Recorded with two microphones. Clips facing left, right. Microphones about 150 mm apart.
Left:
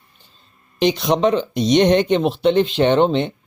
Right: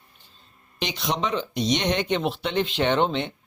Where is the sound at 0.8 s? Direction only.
40° left (ahead or behind).